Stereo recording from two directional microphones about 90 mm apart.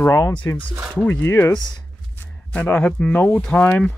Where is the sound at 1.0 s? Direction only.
20° left (ahead or behind).